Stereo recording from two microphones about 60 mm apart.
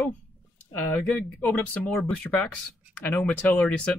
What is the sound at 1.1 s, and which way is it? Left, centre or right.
Speech, left.